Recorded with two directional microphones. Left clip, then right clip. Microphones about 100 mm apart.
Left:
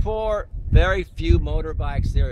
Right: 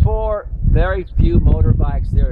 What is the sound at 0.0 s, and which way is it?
Speech, 25° left (ahead or behind).